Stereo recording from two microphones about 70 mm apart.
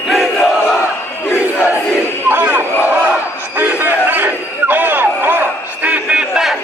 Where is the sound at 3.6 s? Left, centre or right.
Right.